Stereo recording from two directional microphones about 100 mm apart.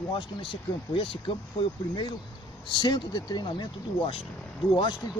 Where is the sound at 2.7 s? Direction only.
50° left (ahead or behind).